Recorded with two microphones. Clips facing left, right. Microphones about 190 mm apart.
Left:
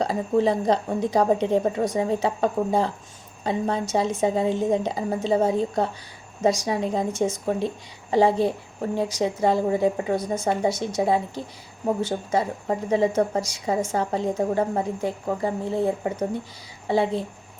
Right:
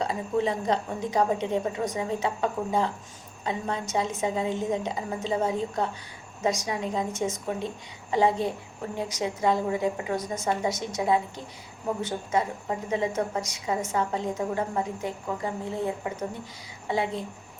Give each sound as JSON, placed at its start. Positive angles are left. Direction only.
{"t": 0.0, "sound": "a woman's voice", "side_deg": 35}